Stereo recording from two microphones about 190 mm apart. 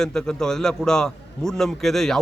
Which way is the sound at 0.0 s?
5° left (ahead or behind).